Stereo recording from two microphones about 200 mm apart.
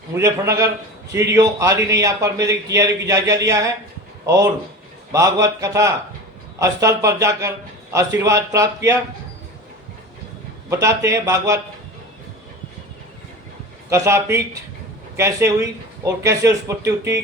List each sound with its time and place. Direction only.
0.1 s a man's voice: 15° right (ahead or behind)
5.1 s a man's voice: 15° right (ahead or behind)
10.7 s a man's voice: 15° right (ahead or behind)
13.9 s a man's voice: 15° right (ahead or behind)